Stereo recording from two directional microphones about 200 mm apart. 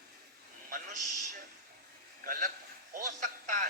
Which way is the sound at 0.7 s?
40° right (ahead or behind).